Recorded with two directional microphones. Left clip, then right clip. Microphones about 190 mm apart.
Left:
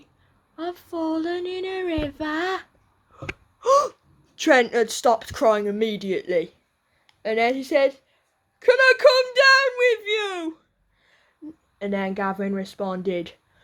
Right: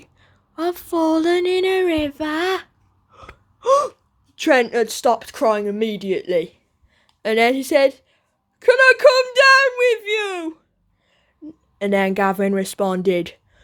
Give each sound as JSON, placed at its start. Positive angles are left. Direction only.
{"t": 0.5, "sound": "speech", "side_deg": -40}
{"t": 3.1, "sound": "gasp", "side_deg": -10}
{"t": 4.4, "sound": "speech", "side_deg": -10}
{"t": 7.2, "sound": "speech", "side_deg": -40}
{"t": 11.8, "sound": "speech", "side_deg": -40}